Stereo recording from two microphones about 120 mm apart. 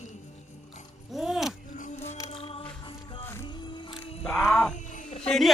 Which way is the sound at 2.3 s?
50° left (ahead or behind).